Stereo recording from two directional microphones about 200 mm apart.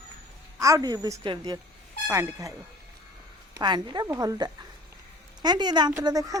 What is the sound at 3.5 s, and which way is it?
Speech, 20° right (ahead or behind).